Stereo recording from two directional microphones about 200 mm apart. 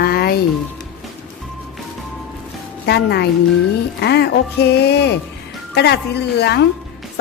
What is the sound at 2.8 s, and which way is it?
Speech, 55° left (ahead or behind).